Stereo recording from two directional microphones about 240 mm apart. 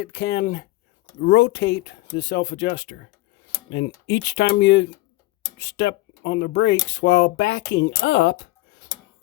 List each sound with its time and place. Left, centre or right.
0.0 s speech: left